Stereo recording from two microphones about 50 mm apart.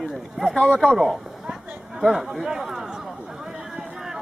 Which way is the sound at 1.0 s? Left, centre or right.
Centre.